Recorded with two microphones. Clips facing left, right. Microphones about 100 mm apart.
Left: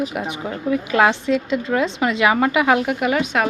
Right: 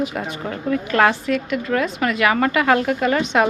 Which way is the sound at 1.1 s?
20° left (ahead or behind).